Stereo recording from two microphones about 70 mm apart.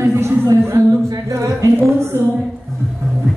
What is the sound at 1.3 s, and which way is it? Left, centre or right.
Speech, right.